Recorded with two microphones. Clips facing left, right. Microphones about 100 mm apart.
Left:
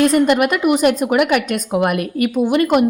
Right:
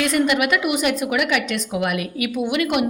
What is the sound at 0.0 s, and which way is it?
A woman's voice, 40° left (ahead or behind).